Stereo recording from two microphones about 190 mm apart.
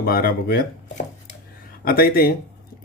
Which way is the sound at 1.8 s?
50° left (ahead or behind).